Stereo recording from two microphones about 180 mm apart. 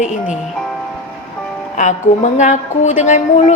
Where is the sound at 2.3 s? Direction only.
40° left (ahead or behind).